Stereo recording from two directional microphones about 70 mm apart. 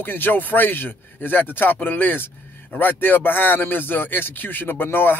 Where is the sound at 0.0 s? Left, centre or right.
Left.